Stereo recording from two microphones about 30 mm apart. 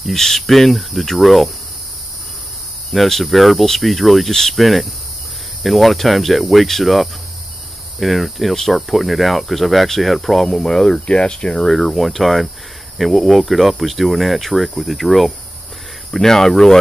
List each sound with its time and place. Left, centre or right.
0.1 s speech: centre
2.9 s speech: centre
4.3 s speech: centre
4.6 s speech: centre
11.1 s speech: left
11.6 s speech: centre
16.1 s speech: centre